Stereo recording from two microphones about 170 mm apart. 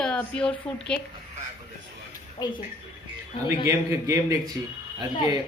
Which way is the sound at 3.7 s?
20° right (ahead or behind).